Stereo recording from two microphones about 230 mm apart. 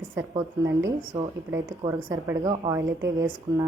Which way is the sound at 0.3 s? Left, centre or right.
Centre.